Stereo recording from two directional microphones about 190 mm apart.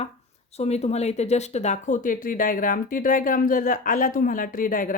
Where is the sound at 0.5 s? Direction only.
35° left (ahead or behind).